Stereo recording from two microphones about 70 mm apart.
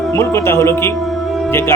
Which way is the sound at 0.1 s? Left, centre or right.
Left.